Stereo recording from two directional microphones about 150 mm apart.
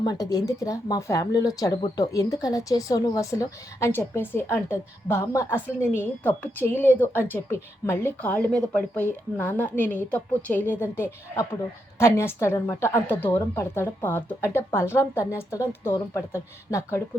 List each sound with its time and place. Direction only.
0.0 s a woman's voice: 25° left (ahead or behind)